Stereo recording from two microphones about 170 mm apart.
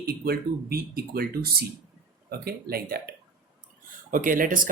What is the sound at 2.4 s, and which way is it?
Speech, 65° right (ahead or behind).